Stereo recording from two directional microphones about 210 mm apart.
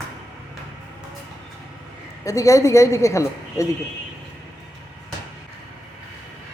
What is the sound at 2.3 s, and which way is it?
A woman's voice, 15° left (ahead or behind).